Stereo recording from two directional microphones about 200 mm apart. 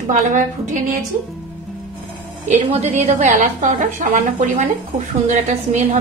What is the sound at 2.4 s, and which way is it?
A woman's voice, 35° right (ahead or behind).